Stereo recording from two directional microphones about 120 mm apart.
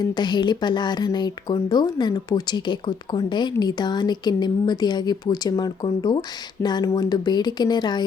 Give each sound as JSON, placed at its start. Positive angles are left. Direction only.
{"t": 0.0, "sound": "speech", "side_deg": 35}